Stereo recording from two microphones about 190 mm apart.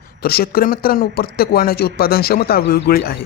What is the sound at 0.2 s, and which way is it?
Speech, 55° left (ahead or behind).